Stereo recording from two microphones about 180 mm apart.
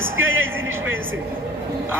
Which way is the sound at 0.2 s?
90° right.